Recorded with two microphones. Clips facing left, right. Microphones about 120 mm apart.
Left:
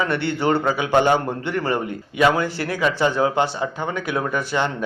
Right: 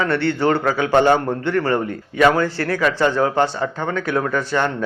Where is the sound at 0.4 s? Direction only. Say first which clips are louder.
Right 1 dB; 25° left (ahead or behind).